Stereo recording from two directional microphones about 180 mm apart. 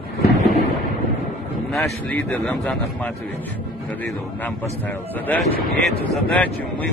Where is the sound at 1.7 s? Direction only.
5° left (ahead or behind).